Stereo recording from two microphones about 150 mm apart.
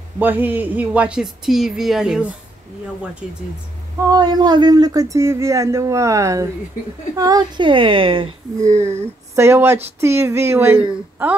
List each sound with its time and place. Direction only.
0.2 s speech: 10° right (ahead or behind)
4.1 s a woman's voice: 30° right (ahead or behind)
9.3 s a woman's voice: 15° right (ahead or behind)